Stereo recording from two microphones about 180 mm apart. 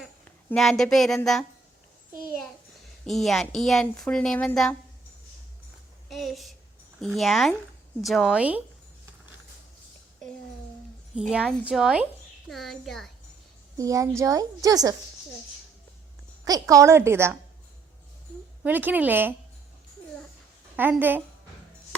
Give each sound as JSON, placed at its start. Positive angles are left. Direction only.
{"t": 0.5, "sound": "a woman's voice", "side_deg": 0}
{"t": 3.1, "sound": "a woman's voice", "side_deg": 0}
{"t": 6.1, "sound": "a woman's voice", "side_deg": 0}
{"t": 11.1, "sound": "a woman's voice", "side_deg": -5}
{"t": 13.7, "sound": "a woman's voice", "side_deg": -20}
{"t": 16.4, "sound": "a woman's voice", "side_deg": -20}
{"t": 18.6, "sound": "a woman's voice", "side_deg": -10}
{"t": 20.7, "sound": "a woman's voice", "side_deg": -10}